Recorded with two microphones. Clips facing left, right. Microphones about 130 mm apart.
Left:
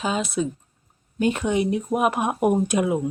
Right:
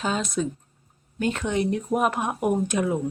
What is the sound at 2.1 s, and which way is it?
Speech, 15° left (ahead or behind).